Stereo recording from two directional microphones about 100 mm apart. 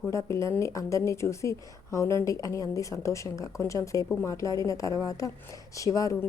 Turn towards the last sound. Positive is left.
turn(degrees=35)  # may be behind; listen again after turning